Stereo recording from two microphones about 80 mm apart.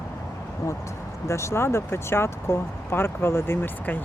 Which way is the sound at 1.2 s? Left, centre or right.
Left.